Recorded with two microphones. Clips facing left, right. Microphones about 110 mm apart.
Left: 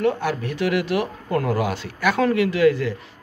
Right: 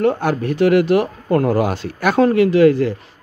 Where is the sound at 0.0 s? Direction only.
45° right (ahead or behind).